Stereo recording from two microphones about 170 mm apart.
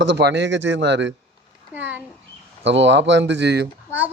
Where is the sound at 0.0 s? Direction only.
85° right.